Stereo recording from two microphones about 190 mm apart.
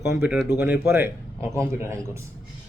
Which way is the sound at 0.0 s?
5° right (ahead or behind).